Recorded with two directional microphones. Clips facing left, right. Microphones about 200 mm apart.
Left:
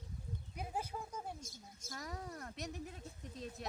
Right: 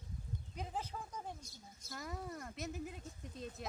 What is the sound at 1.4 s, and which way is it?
Speech, 45° left (ahead or behind).